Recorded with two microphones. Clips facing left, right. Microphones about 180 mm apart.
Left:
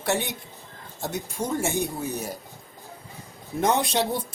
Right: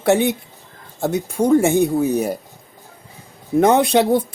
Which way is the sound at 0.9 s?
60° right (ahead or behind).